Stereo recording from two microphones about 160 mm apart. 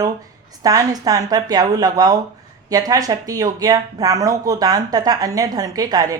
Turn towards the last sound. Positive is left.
turn(degrees=-25)  # may be behind; listen again after turning